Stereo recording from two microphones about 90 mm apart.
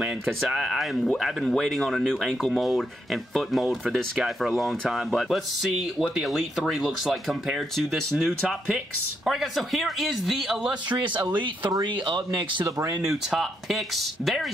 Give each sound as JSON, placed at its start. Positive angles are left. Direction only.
{"t": 0.4, "sound": "speech", "side_deg": -5}
{"t": 10.9, "sound": "speech", "side_deg": -55}
{"t": 13.0, "sound": "speech", "side_deg": -5}